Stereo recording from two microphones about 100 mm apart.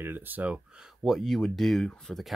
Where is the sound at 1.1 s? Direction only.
Centre (ahead or behind).